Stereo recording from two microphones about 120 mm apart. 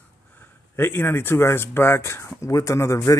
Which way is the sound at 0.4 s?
20° left (ahead or behind).